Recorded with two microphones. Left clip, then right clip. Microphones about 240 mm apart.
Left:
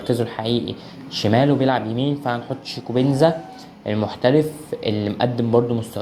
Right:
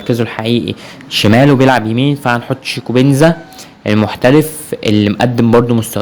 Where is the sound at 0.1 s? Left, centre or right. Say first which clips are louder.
Right 7 dB; right.